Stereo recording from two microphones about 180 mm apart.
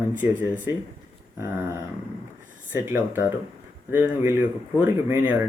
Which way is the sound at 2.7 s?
10° right (ahead or behind).